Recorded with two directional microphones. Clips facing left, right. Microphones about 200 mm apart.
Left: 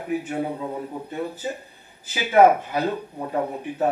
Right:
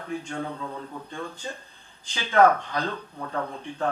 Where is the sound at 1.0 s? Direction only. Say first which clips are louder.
Left 6 dB; 10° left (ahead or behind).